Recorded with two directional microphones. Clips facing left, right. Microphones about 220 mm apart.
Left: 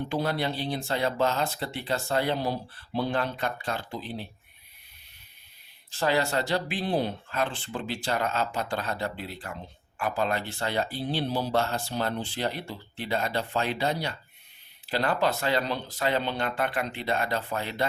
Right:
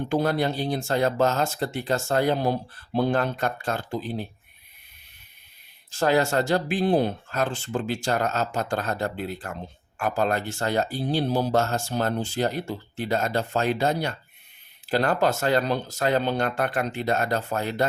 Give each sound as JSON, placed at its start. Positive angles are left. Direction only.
{"t": 0.1, "sound": "speech", "side_deg": -45}
{"t": 5.9, "sound": "speech", "side_deg": -45}